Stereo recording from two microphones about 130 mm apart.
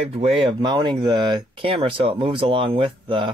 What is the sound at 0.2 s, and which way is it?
Speech, 45° right (ahead or behind).